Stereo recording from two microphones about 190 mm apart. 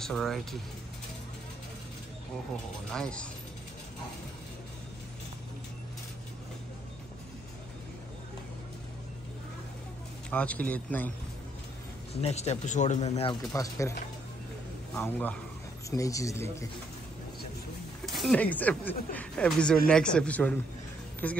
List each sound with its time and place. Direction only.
0.0 s a man's voice: centre (ahead or behind)
2.9 s a man's voice: 5° left (ahead or behind)
10.3 s speech: 5° left (ahead or behind)
12.1 s a man's voice: 30° left (ahead or behind)
13.3 s speech: 20° left (ahead or behind)
15.0 s speech: 10° left (ahead or behind)
18.0 s a man's voice: centre (ahead or behind)